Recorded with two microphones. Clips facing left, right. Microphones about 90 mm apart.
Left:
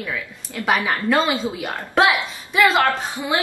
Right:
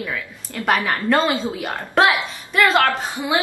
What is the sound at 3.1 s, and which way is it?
Speech, 15° right (ahead or behind).